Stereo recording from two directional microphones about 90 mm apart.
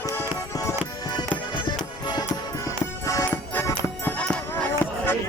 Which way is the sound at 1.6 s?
55° left (ahead or behind).